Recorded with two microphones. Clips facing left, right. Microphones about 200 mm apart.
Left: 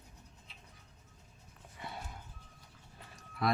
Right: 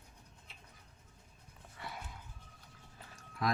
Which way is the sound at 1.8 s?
20° left (ahead or behind).